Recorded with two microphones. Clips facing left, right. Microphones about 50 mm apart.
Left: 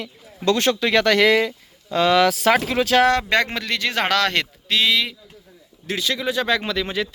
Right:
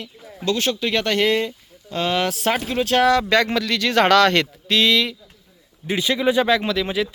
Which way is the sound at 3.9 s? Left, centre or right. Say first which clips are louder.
Right 6 dB; centre.